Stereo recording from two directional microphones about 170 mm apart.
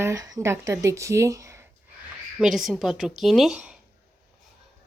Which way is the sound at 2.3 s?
Centre (ahead or behind).